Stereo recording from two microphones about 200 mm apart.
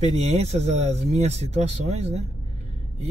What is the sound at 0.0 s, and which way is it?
Speech, 35° right (ahead or behind).